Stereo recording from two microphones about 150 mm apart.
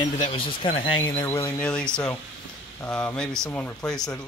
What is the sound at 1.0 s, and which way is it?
Speech, 15° left (ahead or behind).